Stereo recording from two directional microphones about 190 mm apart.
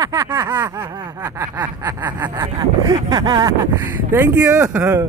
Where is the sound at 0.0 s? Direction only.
15° right (ahead or behind).